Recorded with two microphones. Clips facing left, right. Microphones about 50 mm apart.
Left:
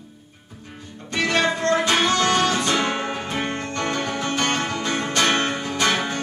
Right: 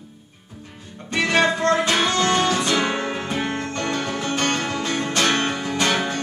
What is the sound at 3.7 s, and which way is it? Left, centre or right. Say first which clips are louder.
Music: even; left.